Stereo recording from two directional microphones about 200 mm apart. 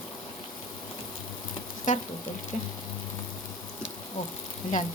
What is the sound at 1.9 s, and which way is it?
Frying, 40° left (ahead or behind).